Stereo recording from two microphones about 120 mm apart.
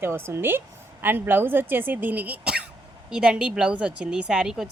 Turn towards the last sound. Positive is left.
turn(degrees=-5)  # may be behind; listen again after turning